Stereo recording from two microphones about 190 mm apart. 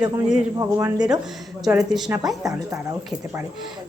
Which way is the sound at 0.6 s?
15° right (ahead or behind).